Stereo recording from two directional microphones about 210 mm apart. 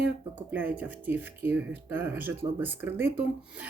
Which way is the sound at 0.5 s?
10° right (ahead or behind).